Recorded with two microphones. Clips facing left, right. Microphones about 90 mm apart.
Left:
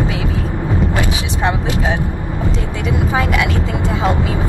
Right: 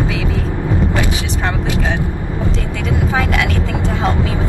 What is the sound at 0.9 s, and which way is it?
Vehicle, 20° left (ahead or behind).